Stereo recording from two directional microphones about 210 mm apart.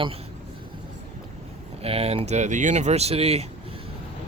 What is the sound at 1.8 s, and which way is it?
Speech, 30° right (ahead or behind).